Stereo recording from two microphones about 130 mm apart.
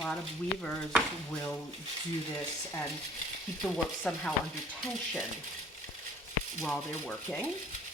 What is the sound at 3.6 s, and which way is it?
Speech, 5° left (ahead or behind).